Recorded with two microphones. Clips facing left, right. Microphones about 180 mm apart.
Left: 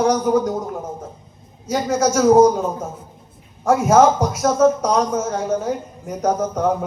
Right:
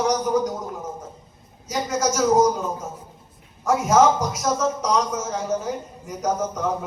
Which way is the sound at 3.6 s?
55° left (ahead or behind).